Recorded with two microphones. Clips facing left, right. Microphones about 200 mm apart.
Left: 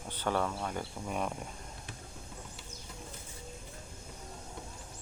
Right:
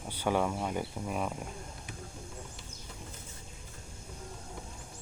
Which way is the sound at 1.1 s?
Centre (ahead or behind).